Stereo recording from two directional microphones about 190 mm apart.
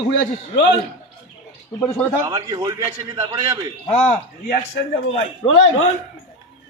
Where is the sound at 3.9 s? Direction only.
30° left (ahead or behind).